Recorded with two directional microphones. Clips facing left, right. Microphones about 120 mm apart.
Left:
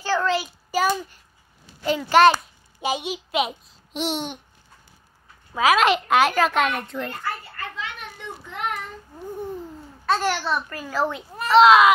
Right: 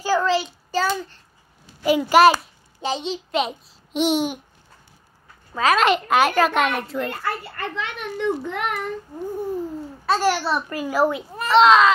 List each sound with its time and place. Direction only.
0.0 s child singing: 10° right (ahead or behind)
0.3 s child singing: centre (ahead or behind)
0.7 s a child's voice: 15° left (ahead or behind)
1.9 s a child's voice: 10° right (ahead or behind)
2.8 s a child's voice: 10° left (ahead or behind)
5.5 s a child's voice: 5° left (ahead or behind)
7.1 s a child's voice: 75° right (ahead or behind)
9.1 s babbling: 10° right (ahead or behind)
10.0 s a child's voice: 5° right (ahead or behind)